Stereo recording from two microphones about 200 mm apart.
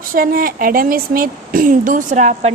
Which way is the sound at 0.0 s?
45° right (ahead or behind).